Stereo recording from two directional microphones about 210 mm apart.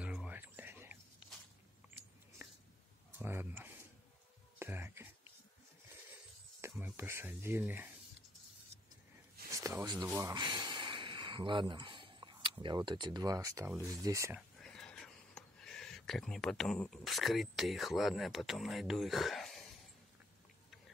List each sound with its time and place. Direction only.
0.0 s whispering: 5° right (ahead or behind)
3.2 s a sound: 10° right (ahead or behind)
6.7 s speech: 10° right (ahead or behind)
9.5 s a sound: 15° right (ahead or behind)
13.8 s speech: 15° right (ahead or behind)
14.6 s speech: 5° left (ahead or behind)